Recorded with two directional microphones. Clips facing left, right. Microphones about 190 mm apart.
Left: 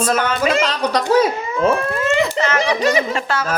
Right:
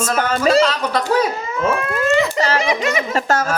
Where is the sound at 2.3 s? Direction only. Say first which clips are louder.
Right 1 dB; 35° right (ahead or behind).